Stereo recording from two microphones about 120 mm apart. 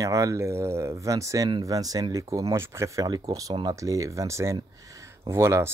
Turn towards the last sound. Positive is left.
turn(degrees=-25)  # may be behind; listen again after turning